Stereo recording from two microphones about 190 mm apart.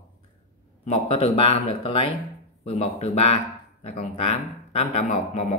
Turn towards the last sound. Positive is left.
turn(degrees=35)  # may be behind; listen again after turning